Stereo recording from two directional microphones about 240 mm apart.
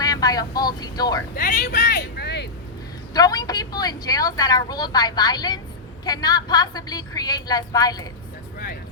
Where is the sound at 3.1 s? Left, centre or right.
Centre.